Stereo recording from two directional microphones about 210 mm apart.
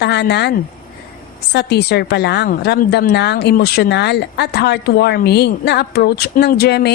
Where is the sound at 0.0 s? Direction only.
55° left (ahead or behind).